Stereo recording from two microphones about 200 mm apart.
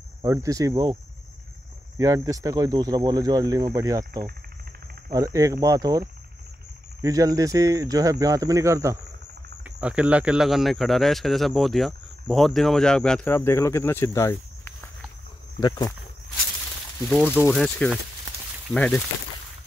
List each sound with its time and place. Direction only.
0.2 s speech: 15° right (ahead or behind)
2.0 s speech: 15° right (ahead or behind)
5.1 s speech: 15° right (ahead or behind); by 15.9 s 20° left (ahead or behind)
17.5 s speech: centre (ahead or behind)